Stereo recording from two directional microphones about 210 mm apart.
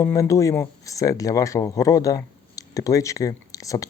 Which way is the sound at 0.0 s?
15° left (ahead or behind).